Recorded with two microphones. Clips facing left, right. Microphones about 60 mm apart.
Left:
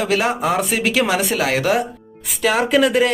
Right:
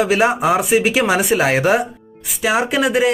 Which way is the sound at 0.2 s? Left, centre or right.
Centre.